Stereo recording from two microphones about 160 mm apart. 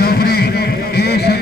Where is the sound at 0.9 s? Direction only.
85° left.